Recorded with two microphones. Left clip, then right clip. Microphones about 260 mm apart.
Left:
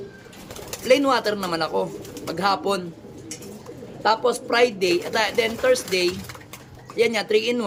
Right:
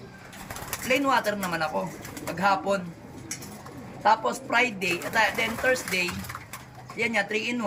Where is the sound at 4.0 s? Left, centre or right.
Centre.